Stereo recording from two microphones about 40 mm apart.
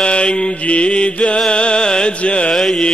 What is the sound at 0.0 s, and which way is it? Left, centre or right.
Mantra, left.